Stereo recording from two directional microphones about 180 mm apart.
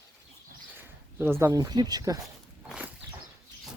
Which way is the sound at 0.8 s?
15° right (ahead or behind).